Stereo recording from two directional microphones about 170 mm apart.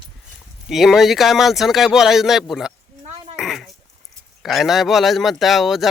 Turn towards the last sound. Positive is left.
turn(degrees=0)  # may be behind; listen again after turning